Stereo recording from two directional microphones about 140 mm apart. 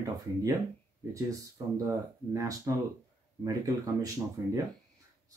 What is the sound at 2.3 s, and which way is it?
Speech, 25° right (ahead or behind).